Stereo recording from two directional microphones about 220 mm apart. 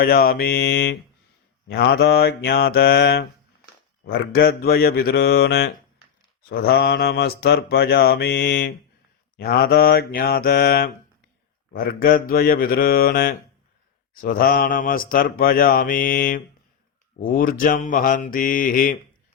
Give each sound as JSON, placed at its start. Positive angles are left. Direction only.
{"t": 0.0, "sound": "mantra", "side_deg": 40}
{"t": 4.3, "sound": "mantra", "side_deg": 45}